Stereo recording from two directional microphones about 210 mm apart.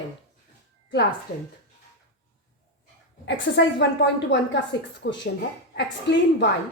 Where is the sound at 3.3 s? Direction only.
55° left (ahead or behind).